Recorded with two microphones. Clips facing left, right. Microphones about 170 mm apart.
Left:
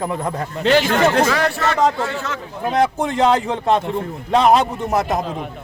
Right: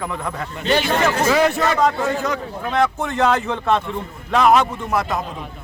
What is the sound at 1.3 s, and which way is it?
Speech, 20° right (ahead or behind).